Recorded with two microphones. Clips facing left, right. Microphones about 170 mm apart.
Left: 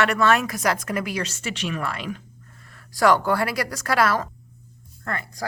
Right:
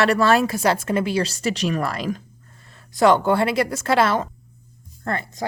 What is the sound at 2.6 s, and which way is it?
Speech, 25° right (ahead or behind).